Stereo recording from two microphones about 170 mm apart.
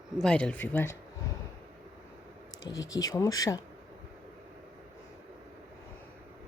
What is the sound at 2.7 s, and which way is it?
Speech, 20° left (ahead or behind).